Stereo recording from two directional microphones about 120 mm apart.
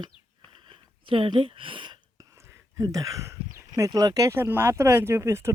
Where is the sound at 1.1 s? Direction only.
45° right (ahead or behind).